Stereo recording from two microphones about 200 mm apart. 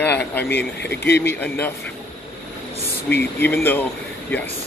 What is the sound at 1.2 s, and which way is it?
Speech, 10° left (ahead or behind).